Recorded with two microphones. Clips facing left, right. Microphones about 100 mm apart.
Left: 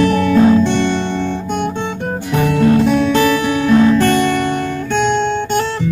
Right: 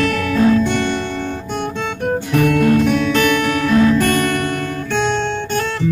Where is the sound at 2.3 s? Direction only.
30° left (ahead or behind).